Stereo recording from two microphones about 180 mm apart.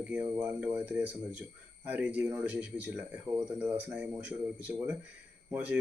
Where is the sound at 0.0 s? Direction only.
5° right (ahead or behind).